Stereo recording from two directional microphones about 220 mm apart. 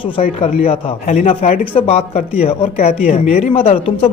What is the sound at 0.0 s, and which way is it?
A man's voice, 30° left (ahead or behind).